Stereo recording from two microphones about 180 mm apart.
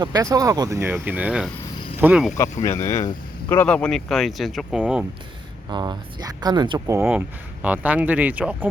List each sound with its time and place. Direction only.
0.0 s speech: 20° right (ahead or behind)
2.6 s speech: 15° left (ahead or behind); by 5.0 s 5° right (ahead or behind)
5.6 s speech: 25° right (ahead or behind); by 8.7 s 10° right (ahead or behind)